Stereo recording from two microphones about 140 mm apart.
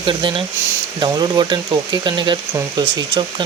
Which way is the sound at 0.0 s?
35° right (ahead or behind).